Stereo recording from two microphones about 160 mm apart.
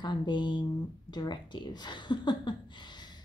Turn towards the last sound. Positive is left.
turn(degrees=25)  # may be behind; listen again after turning